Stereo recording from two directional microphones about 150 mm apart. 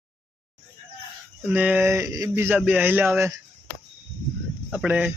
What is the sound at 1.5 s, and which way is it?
Speech, 10° right (ahead or behind).